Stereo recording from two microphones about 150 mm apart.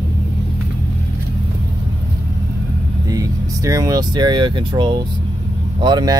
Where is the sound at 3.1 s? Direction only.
25° right (ahead or behind).